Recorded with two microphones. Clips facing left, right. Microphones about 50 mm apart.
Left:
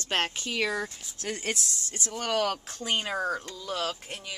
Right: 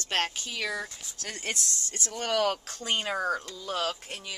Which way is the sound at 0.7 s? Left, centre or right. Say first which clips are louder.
Left 2 dB; centre.